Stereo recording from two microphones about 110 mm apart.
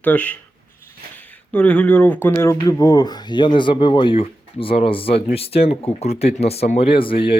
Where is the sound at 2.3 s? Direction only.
30° left (ahead or behind).